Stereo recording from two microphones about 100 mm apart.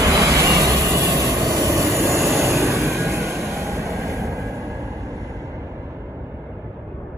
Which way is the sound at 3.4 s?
30° right (ahead or behind).